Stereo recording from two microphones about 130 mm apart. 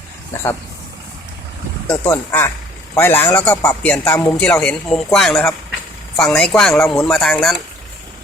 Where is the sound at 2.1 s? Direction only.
15° left (ahead or behind); by 7.6 s centre (ahead or behind).